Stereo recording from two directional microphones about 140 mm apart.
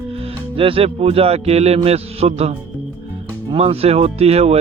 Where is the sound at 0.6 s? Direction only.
40° right (ahead or behind).